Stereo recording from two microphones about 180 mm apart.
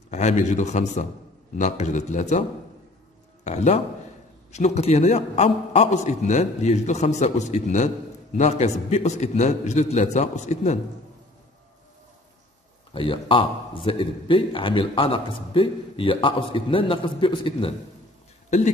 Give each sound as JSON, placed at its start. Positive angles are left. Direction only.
{"t": 0.1, "sound": "a man's voice", "side_deg": 40}
{"t": 3.4, "sound": "a man's voice", "side_deg": 40}
{"t": 12.9, "sound": "speech", "side_deg": 30}